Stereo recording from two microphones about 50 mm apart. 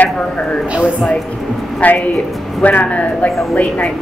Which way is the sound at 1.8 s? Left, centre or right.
Left.